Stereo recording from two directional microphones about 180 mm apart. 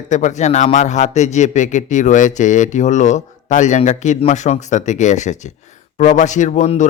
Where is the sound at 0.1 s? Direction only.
40° left (ahead or behind).